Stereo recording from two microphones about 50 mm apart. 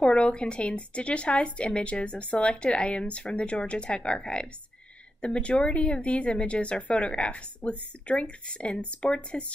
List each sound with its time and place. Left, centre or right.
0.0 s speech: left